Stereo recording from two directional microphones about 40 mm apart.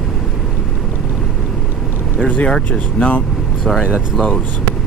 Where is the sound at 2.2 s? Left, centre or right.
Left.